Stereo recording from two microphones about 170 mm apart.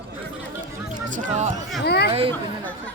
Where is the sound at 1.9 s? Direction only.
75° left (ahead or behind).